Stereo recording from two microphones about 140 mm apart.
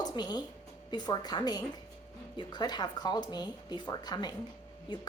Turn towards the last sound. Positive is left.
turn(degrees=30)  # may be behind; listen again after turning